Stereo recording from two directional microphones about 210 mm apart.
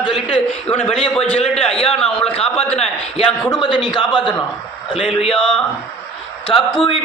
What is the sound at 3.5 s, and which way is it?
Speech, 20° left (ahead or behind).